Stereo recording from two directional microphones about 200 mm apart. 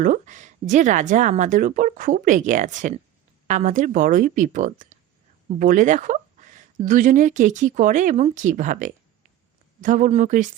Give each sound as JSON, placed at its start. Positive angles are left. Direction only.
{"t": 0.0, "sound": "speech", "side_deg": -40}